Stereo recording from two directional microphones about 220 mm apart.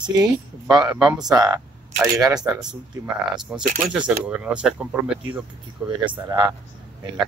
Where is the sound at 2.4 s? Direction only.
5° right (ahead or behind).